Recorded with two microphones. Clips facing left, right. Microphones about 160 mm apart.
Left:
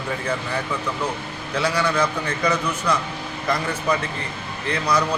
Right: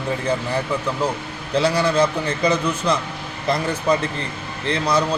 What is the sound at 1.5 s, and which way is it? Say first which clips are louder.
A man's voice: right 4 dB; 30° right (ahead or behind).